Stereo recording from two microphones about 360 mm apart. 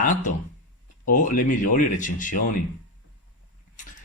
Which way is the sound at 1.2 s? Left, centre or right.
Left.